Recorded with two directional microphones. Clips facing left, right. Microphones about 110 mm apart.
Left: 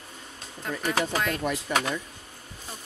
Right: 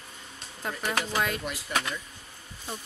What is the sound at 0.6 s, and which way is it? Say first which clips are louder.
Speech: left 2 dB; 5° right (ahead or behind).